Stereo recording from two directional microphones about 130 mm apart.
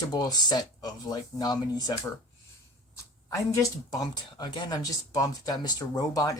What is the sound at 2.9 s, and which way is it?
Speech, 25° left (ahead or behind).